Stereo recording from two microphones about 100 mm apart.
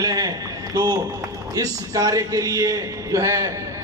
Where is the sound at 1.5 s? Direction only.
35° right (ahead or behind).